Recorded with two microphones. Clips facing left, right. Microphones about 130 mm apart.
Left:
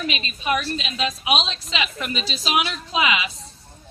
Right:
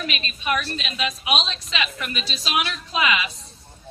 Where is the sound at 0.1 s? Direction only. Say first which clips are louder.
Left 2 dB; 25° left (ahead or behind).